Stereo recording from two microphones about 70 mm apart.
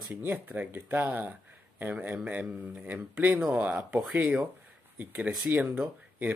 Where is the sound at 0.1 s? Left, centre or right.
Right.